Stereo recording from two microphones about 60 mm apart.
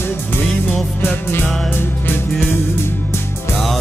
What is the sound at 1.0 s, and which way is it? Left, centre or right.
Music, left.